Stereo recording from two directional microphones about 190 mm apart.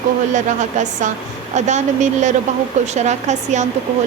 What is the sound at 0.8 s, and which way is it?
A woman's voice, 40° right (ahead or behind).